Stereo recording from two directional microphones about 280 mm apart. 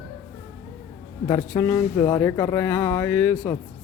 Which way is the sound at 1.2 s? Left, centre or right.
Centre.